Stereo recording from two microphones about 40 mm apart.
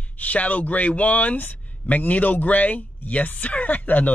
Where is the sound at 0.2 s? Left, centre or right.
Left.